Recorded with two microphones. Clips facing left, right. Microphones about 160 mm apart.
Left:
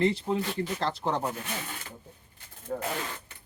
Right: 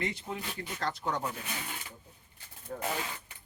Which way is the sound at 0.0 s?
30° left (ahead or behind).